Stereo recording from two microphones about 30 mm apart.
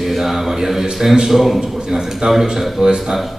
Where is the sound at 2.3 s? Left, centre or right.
Centre.